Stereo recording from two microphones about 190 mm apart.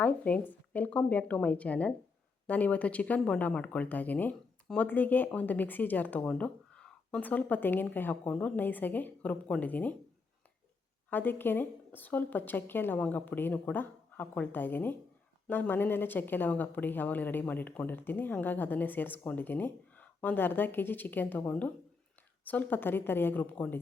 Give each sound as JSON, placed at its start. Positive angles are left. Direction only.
{"t": 0.0, "sound": "speech", "side_deg": 10}
{"t": 11.1, "sound": "speech", "side_deg": 10}